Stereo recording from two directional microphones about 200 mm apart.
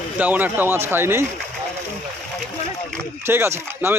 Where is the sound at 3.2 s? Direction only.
10° right (ahead or behind).